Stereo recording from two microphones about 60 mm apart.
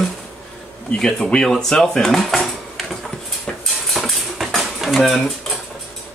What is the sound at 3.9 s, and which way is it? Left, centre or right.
Cutlery, centre.